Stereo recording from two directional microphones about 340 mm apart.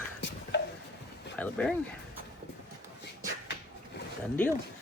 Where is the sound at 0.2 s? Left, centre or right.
Left.